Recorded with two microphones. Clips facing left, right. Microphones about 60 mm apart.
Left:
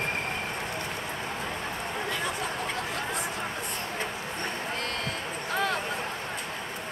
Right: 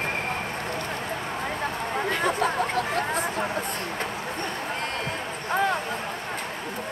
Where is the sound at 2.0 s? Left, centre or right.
Right.